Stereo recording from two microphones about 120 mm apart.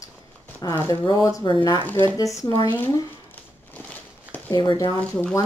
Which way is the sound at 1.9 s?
15° left (ahead or behind).